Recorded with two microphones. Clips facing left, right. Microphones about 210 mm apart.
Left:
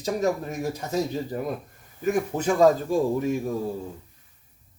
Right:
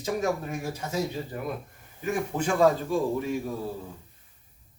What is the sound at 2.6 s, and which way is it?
Speech, 45° left (ahead or behind).